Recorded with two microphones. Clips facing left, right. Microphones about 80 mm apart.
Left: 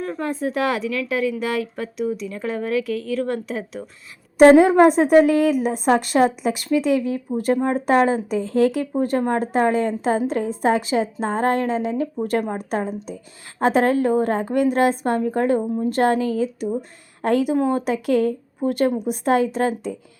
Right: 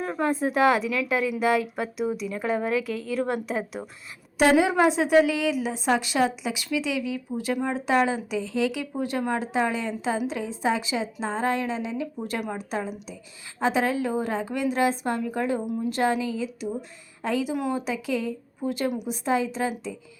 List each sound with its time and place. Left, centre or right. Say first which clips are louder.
0.0 s a woman's voice: left 1 dB; centre
3.6 s a woman's voice: left 1 dB; centre
4.4 s speech: left 9 dB; left